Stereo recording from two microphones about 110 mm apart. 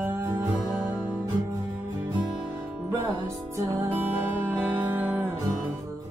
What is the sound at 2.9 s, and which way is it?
Music, 25° right (ahead or behind).